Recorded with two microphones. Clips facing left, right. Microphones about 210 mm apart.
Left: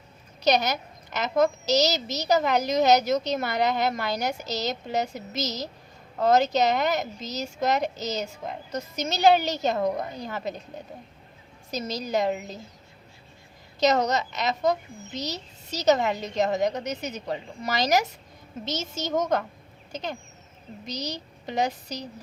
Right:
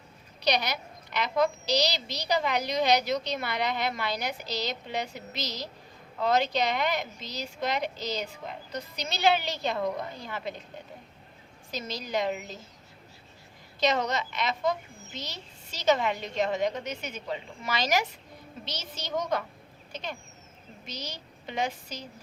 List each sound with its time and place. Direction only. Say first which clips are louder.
0.4 s a woman's voice: left 5 dB; 45° left (ahead or behind)
11.7 s a woman's voice: left 5 dB; 40° left (ahead or behind)
13.7 s a woman's voice: left 5 dB; 40° left (ahead or behind)